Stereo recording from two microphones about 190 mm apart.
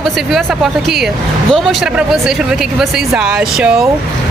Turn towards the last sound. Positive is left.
turn(degrees=-5)  # may be behind; listen again after turning